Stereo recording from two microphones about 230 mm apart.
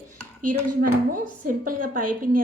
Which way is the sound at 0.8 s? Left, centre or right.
Right.